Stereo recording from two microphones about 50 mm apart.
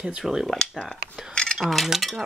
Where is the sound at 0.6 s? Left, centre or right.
Centre.